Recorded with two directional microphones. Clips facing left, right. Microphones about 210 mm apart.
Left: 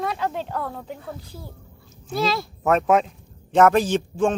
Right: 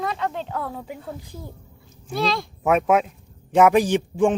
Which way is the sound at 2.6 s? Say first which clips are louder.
Even; 10° right (ahead or behind).